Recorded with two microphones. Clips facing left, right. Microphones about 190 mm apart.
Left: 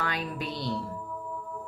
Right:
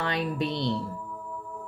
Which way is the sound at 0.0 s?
25° right (ahead or behind).